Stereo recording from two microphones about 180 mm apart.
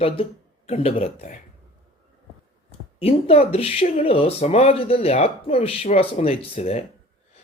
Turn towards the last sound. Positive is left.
turn(degrees=35)  # may be behind; listen again after turning